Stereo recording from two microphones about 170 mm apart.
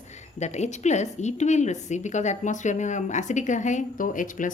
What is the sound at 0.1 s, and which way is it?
A woman's voice, 40° left (ahead or behind).